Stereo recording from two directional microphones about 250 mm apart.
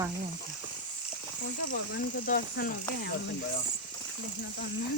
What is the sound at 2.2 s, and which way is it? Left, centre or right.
Speech, left.